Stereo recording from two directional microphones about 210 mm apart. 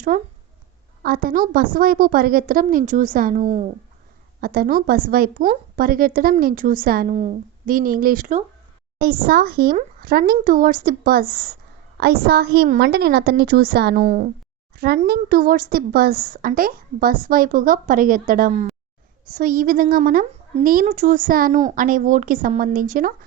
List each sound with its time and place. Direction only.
0.1 s a woman's voice: 40° right (ahead or behind)
14.0 s a woman's voice: 40° right (ahead or behind)